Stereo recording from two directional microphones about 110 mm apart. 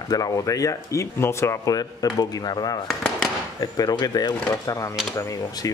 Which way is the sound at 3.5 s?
35° left (ahead or behind).